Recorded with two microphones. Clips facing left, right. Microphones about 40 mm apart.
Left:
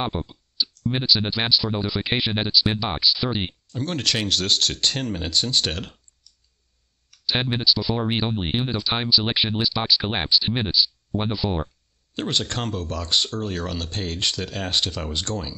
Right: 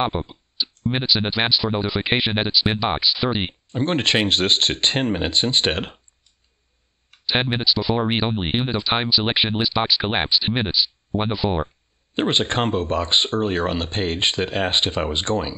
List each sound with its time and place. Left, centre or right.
0.0 s speech: right
3.6 s speech: right